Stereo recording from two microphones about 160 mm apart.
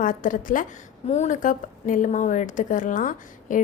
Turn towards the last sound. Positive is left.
turn(degrees=55)  # may be behind; listen again after turning